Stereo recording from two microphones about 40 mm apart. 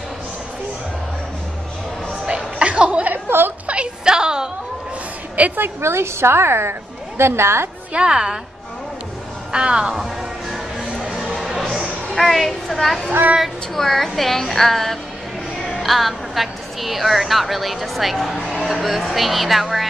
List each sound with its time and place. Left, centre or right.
2.2 s music: right
3.3 s a sound: right
3.6 s a sound: right
4.0 s a sound: centre
5.6 s a woman's voice: right
7.9 s a woman's voice: right
9.5 s a woman's voice: right
10.5 s music: centre
12.2 s a woman's voice: centre